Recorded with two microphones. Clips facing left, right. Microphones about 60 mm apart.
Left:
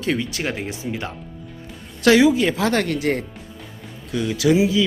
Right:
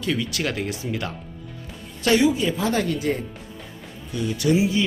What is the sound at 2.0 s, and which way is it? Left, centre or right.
Speech, left.